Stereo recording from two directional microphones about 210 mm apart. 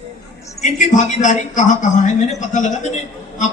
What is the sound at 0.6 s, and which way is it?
A woman's voice, 35° left (ahead or behind).